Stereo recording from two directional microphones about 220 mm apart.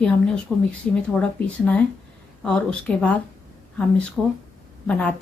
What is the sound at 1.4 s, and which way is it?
A woman's voice, 5° left (ahead or behind).